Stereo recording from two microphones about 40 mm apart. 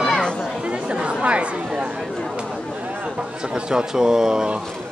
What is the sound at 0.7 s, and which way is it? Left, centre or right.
Chatter, right.